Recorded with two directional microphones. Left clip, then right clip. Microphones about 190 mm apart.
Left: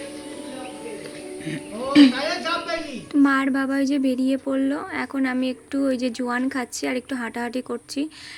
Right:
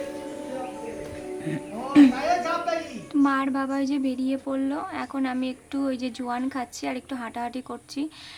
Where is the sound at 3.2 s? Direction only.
15° left (ahead or behind).